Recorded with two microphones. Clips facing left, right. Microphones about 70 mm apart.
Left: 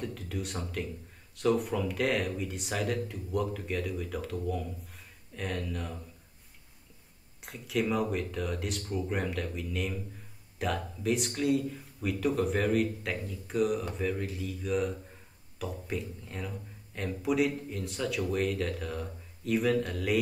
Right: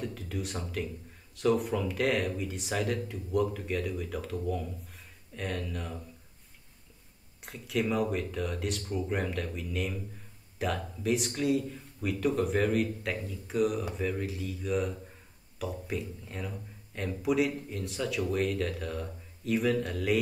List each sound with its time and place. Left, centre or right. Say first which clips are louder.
0.0 s a sound: even; centre
1.3 s speech: right 1 dB; centre
7.4 s speech: even; centre